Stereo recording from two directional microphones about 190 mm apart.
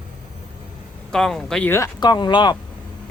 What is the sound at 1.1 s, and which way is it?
Speech, centre (ahead or behind).